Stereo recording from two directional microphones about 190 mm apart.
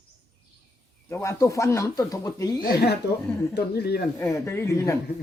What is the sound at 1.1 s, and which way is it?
Speech, 15° left (ahead or behind).